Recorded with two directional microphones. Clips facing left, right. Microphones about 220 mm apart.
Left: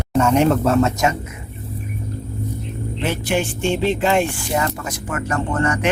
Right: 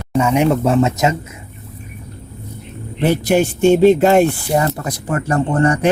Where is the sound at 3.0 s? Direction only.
40° right (ahead or behind).